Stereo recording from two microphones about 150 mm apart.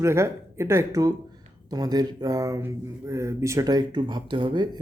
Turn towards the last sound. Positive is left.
turn(degrees=-30)  # may be behind; listen again after turning